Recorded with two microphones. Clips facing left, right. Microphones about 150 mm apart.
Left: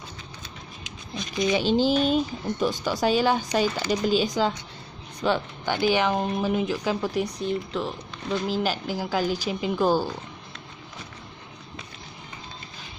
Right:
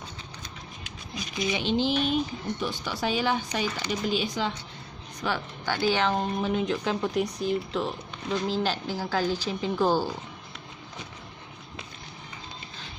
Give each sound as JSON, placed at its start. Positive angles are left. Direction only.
{"t": 1.5, "sound": "speech", "side_deg": 40}
{"t": 5.2, "sound": "speech", "side_deg": 25}